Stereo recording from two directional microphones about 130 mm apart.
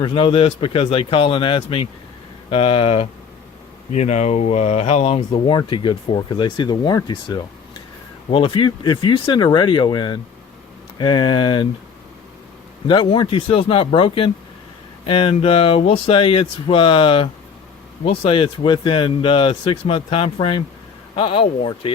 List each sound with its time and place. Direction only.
0.0 s speech: 40° left (ahead or behind)
3.9 s speech: 60° left (ahead or behind); by 11.7 s 40° left (ahead or behind)
12.9 s speech: 40° left (ahead or behind)